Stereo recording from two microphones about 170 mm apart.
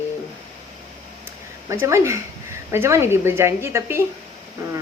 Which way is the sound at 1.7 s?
15° right (ahead or behind).